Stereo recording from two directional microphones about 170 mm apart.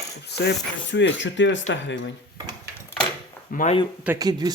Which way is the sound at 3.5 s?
50° left (ahead or behind).